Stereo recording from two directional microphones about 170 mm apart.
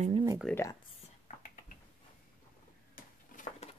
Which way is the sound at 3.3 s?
45° left (ahead or behind).